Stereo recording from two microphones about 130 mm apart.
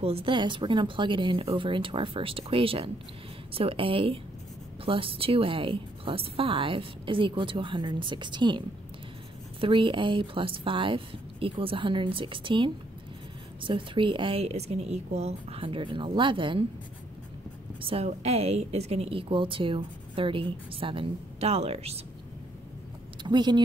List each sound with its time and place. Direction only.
0.0 s a woman's voice: 45° right (ahead or behind)
17.8 s a woman's voice: 50° right (ahead or behind)
23.2 s a woman's voice: 35° right (ahead or behind)